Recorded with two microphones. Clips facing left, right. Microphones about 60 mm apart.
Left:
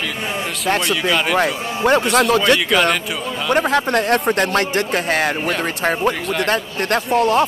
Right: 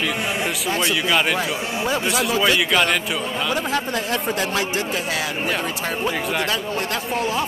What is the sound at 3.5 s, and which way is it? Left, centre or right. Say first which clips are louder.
Speech: left 9 dB; left.